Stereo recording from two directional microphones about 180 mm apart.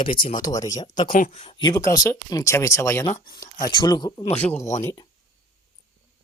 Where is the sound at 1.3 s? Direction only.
30° left (ahead or behind); by 5.1 s 15° left (ahead or behind).